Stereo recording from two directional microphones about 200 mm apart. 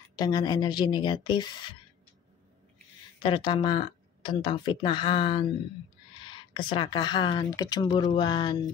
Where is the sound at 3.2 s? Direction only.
25° left (ahead or behind).